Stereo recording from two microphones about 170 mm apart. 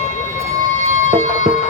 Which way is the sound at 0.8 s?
45° right (ahead or behind).